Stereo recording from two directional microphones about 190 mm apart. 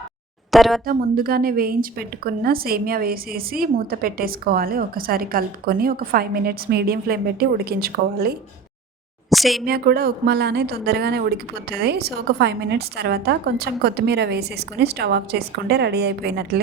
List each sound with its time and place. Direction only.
0.5 s speech: centre (ahead or behind)
0.9 s a woman's voice: 50° right (ahead or behind)
9.3 s speech: centre (ahead or behind)
9.6 s a woman's voice: 55° right (ahead or behind)